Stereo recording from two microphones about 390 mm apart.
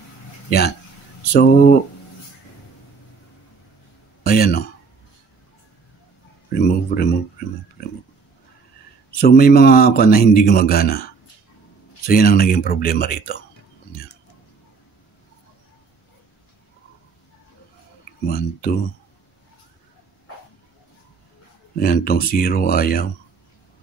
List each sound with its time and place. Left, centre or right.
0.5 s speech: left
4.2 s speech: left
6.5 s a sound: left
9.1 s speech: left
12.1 s speech: left
18.2 s speech: left
21.7 s speech: left